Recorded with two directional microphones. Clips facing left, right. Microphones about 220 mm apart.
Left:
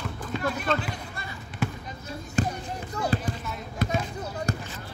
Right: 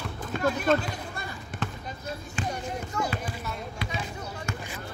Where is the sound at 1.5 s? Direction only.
50° right (ahead or behind).